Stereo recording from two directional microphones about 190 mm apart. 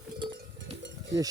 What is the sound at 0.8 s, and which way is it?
Cowbell, 70° right (ahead or behind).